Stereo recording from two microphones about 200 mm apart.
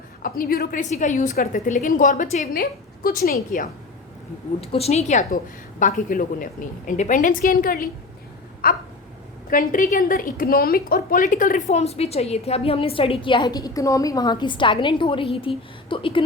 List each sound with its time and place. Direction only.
0.2 s a woman's voice: 45° left (ahead or behind)
4.6 s a woman's voice: 30° left (ahead or behind)